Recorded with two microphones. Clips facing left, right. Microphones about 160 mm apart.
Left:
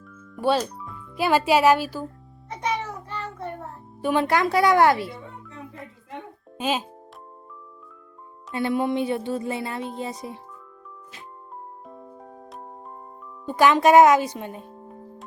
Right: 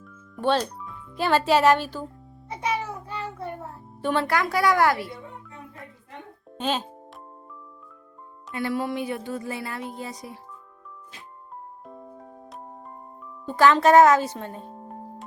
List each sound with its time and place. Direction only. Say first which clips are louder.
0.3 s speech: left 1 dB; 10° left (ahead or behind)
2.5 s child singing: even; 5° right (ahead or behind)
4.0 s speech: left 3 dB; 15° left (ahead or behind)
6.6 s speech: left 1 dB; 10° left (ahead or behind)
8.5 s speech: left 4 dB; 20° left (ahead or behind)
13.4 s speech: even; 15° left (ahead or behind)